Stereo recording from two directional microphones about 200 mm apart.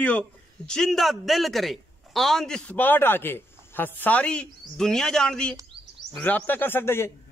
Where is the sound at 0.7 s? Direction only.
Centre (ahead or behind).